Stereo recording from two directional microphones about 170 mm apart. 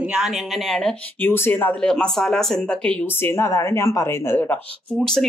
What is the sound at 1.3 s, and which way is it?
Speech, 10° left (ahead or behind).